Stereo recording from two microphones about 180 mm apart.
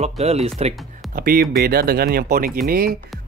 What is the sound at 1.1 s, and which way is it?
Speech, 55° right (ahead or behind).